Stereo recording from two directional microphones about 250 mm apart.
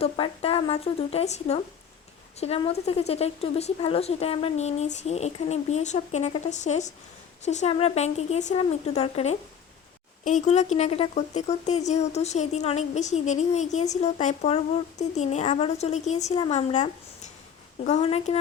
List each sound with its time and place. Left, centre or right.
0.0 s speech: left